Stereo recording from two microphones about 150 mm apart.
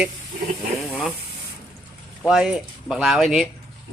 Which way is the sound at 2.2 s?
5° right (ahead or behind).